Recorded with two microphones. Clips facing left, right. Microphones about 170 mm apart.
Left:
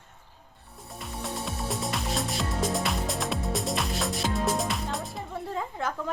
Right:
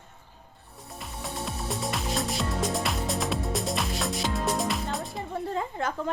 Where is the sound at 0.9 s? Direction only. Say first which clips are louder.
Left 1 dB; centre (ahead or behind).